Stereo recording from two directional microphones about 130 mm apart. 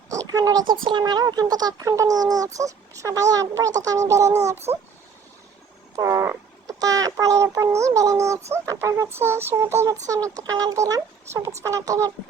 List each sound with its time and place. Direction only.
0.1 s speech: 25° right (ahead or behind)
4.7 s speech: 50° right (ahead or behind)
6.0 s speech: 25° right (ahead or behind)